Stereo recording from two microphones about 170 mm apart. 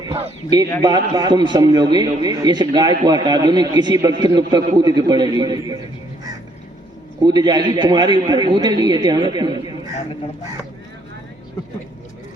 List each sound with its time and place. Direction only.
0.0 s a man's voice: 30° right (ahead or behind)
7.2 s a man's voice: 25° right (ahead or behind)